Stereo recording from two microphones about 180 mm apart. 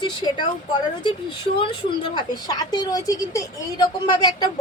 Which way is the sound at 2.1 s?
20° left (ahead or behind).